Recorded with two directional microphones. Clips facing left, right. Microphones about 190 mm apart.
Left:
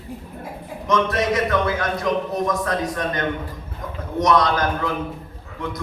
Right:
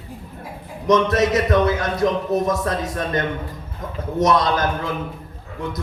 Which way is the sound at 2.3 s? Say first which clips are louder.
Right 2 dB; 25° right (ahead or behind).